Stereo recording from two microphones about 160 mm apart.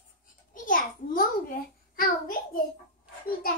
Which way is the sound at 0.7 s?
60° left (ahead or behind).